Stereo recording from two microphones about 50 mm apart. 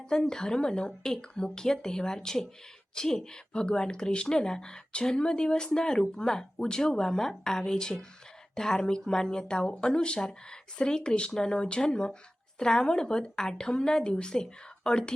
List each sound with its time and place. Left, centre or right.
0.3 s speech: centre